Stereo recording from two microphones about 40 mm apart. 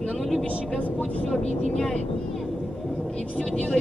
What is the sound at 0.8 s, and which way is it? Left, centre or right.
Speech, left.